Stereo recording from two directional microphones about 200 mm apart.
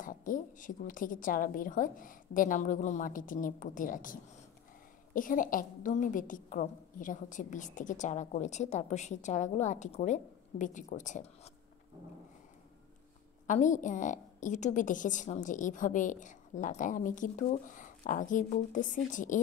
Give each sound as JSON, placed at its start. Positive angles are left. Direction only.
{"t": 0.0, "sound": "a woman's voice", "side_deg": 40}
{"t": 13.5, "sound": "a woman's voice", "side_deg": 40}